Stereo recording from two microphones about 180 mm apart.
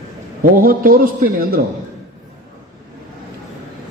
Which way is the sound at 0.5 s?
55° right (ahead or behind).